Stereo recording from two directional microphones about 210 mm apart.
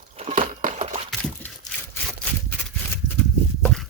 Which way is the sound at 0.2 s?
35° right (ahead or behind).